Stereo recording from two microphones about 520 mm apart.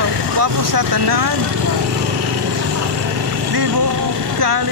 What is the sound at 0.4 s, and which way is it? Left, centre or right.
Speech, right.